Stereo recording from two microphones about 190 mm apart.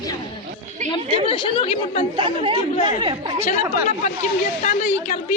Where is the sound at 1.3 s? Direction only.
25° left (ahead or behind).